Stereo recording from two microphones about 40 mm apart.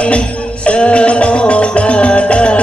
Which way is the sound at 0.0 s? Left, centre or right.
Left.